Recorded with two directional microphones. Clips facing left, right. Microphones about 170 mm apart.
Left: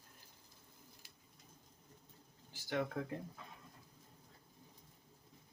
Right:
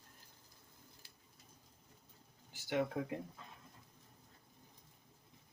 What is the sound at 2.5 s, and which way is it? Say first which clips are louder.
Speech: right 2 dB; 15° right (ahead or behind).